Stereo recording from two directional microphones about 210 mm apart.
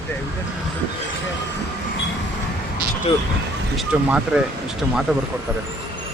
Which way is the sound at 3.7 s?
5° right (ahead or behind).